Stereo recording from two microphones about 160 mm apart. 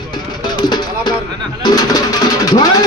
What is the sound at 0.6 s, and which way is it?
Music, 25° left (ahead or behind).